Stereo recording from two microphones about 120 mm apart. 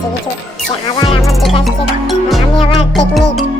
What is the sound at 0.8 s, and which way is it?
Music, 40° left (ahead or behind).